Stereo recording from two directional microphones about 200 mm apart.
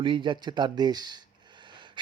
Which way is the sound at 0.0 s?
25° right (ahead or behind).